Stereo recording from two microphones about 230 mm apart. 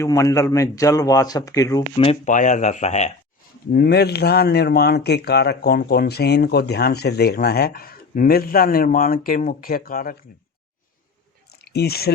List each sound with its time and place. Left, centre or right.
0.0 s a man's voice: centre; by 3.1 s left
3.7 s speech: left
11.6 s speech: left